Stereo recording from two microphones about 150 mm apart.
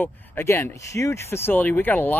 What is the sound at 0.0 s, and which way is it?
Speech, 15° left (ahead or behind).